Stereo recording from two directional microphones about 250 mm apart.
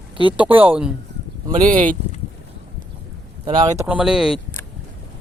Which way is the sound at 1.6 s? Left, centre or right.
Right.